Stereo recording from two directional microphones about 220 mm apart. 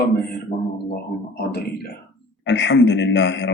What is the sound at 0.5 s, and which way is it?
Speech, 35° left (ahead or behind).